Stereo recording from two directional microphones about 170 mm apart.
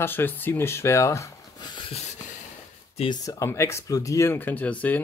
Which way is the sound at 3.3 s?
15° left (ahead or behind).